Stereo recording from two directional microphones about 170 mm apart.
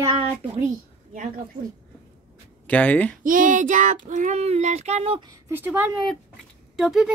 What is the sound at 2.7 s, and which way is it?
Speech, 10° left (ahead or behind).